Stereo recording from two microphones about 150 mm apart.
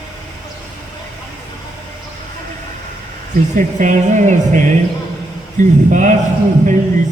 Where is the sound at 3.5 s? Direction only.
55° right (ahead or behind).